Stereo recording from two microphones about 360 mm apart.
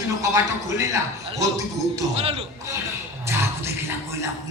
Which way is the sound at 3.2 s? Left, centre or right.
Centre.